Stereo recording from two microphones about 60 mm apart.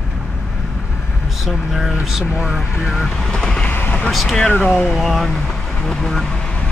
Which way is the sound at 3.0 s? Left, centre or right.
Centre.